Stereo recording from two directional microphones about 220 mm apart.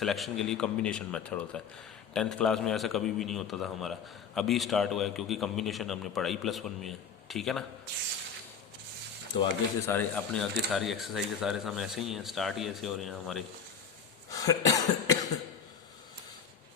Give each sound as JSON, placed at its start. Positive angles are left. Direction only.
{"t": 0.0, "sound": "speech", "side_deg": 0}
{"t": 9.4, "sound": "speech", "side_deg": 10}
{"t": 14.3, "sound": "cough", "side_deg": 15}